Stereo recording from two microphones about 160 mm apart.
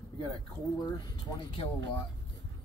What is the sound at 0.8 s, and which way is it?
Speech, 25° left (ahead or behind).